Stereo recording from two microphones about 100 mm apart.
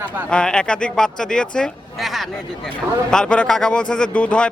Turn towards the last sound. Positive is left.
turn(degrees=10)  # may be behind; listen again after turning